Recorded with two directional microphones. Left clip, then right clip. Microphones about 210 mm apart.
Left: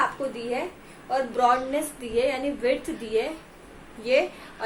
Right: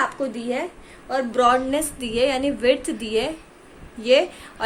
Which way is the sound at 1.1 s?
50° right (ahead or behind).